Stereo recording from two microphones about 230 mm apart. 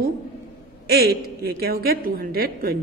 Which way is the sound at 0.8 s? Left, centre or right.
Right.